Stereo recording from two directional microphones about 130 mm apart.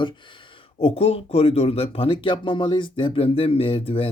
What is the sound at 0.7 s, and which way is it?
Speech, 50° left (ahead or behind).